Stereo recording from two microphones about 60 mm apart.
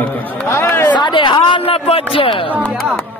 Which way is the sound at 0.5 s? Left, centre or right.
Left.